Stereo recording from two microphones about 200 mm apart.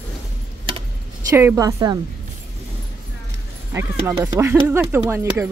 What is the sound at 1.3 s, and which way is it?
Speech, 10° right (ahead or behind).